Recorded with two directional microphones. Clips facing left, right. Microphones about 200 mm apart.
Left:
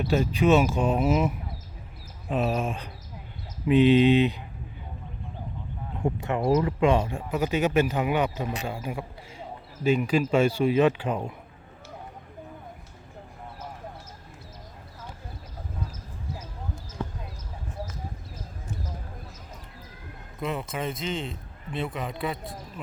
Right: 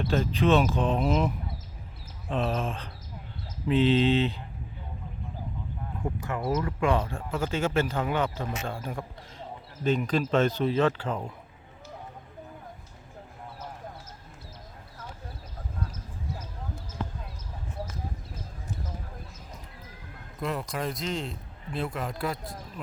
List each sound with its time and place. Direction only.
0.0 s speech: 15° left (ahead or behind)
2.3 s speech: 10° left (ahead or behind)
6.0 s speech: 25° left (ahead or behind)
20.4 s a man's voice: centre (ahead or behind)